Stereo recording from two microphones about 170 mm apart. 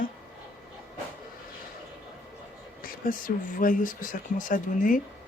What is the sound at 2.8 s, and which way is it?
Speech, 55° left (ahead or behind).